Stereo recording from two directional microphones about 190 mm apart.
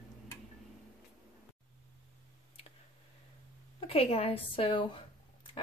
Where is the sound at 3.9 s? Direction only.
30° left (ahead or behind).